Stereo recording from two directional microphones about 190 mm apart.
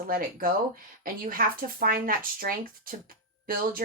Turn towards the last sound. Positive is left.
turn(degrees=-50)  # may be behind; listen again after turning